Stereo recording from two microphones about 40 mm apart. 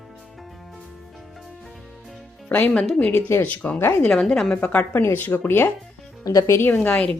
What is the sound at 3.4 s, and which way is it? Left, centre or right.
Speech, left.